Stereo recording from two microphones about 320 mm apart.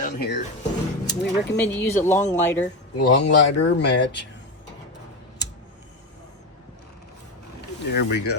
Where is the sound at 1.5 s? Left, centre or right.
Centre.